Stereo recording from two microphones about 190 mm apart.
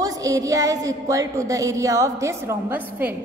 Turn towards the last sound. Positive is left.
turn(degrees=-10)  # may be behind; listen again after turning